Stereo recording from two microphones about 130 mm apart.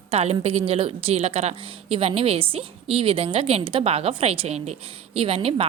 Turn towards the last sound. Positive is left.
turn(degrees=-45)  # may be behind; listen again after turning